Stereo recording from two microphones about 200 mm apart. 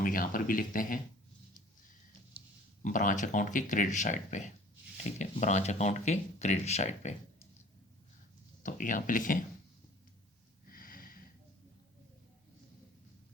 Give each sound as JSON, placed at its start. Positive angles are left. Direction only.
{"t": 0.0, "sound": "speech", "side_deg": 45}
{"t": 2.8, "sound": "speech", "side_deg": 40}
{"t": 8.6, "sound": "speech", "side_deg": 40}
{"t": 10.7, "sound": "sniff", "side_deg": 45}